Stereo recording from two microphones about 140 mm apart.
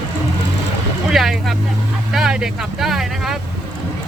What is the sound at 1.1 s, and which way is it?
Speech, centre (ahead or behind).